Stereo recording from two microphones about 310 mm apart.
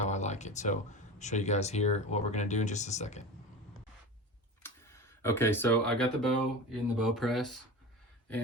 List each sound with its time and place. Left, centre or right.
0.1 s a sound: left
1.2 s speech: left
4.6 s speech: centre